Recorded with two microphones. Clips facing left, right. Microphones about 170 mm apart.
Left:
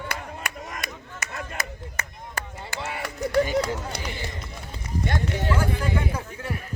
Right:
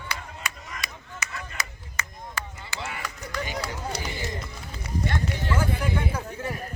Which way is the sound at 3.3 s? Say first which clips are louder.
Left 11 dB; 45° left (ahead or behind).